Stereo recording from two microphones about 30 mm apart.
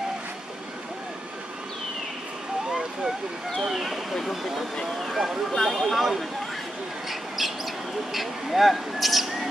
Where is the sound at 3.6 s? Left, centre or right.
Centre.